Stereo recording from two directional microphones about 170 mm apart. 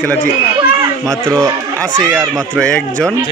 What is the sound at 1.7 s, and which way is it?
Speech, 5° left (ahead or behind).